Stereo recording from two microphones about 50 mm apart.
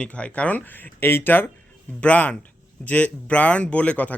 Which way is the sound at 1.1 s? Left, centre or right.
Left.